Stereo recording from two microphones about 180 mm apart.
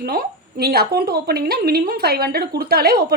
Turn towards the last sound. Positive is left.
turn(degrees=-60)  # may be behind; listen again after turning